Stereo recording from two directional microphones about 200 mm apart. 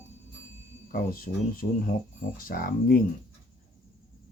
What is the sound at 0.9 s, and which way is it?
Speech, 45° left (ahead or behind).